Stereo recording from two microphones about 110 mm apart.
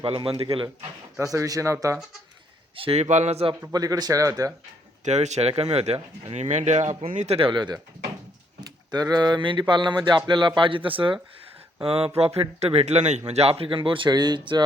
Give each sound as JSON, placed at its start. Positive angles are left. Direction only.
{"t": 0.0, "sound": "speech", "side_deg": -55}
{"t": 1.2, "sound": "speech", "side_deg": -30}
{"t": 2.7, "sound": "speech", "side_deg": -55}
{"t": 3.0, "sound": "speech", "side_deg": -85}
{"t": 3.7, "sound": "speech", "side_deg": -35}
{"t": 5.0, "sound": "speech", "side_deg": -90}
{"t": 6.3, "sound": "speech", "side_deg": -90}